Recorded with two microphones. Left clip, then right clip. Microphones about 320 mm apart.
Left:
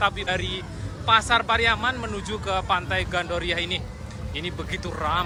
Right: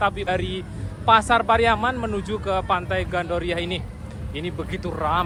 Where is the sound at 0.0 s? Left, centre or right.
Centre.